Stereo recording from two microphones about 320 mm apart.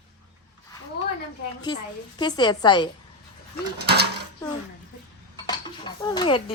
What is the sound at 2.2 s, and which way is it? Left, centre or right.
Speech, centre.